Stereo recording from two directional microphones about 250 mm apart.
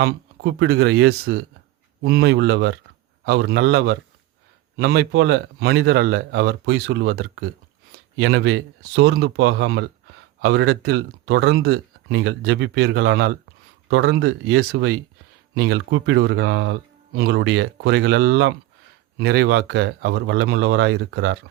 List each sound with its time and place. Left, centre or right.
0.0 s speech: right